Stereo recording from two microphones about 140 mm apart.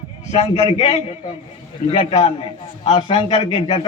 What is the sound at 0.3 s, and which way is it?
A man's voice, 45° left (ahead or behind).